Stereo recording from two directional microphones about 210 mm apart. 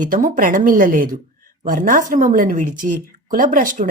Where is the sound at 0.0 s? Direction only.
40° right (ahead or behind).